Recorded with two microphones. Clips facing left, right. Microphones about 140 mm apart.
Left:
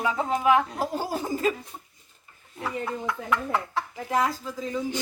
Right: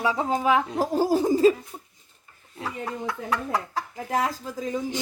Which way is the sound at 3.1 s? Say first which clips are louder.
Even; 35° right (ahead or behind).